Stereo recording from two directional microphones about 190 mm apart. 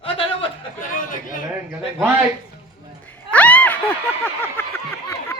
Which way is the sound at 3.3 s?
10° left (ahead or behind).